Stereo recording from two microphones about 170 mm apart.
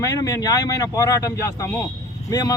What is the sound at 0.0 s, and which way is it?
Speech, 20° left (ahead or behind).